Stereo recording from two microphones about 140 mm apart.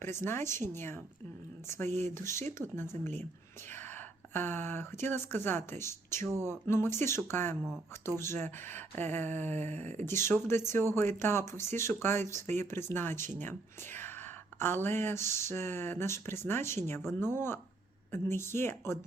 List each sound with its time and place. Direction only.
0.0 s speech: 20° left (ahead or behind)
4.4 s speech: 15° left (ahead or behind)